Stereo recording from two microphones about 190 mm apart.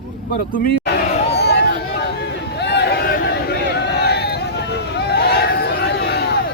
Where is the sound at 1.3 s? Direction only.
60° left (ahead or behind).